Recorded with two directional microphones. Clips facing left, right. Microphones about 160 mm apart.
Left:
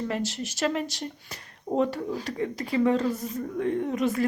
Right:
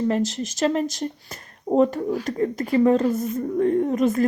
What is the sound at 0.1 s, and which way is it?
Speech, 45° right (ahead or behind).